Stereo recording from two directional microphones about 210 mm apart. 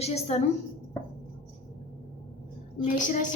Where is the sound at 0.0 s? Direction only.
30° left (ahead or behind).